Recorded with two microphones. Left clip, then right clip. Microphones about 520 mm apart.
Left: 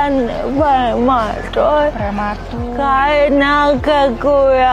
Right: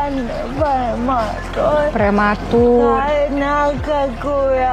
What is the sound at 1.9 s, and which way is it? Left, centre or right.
Speech, right.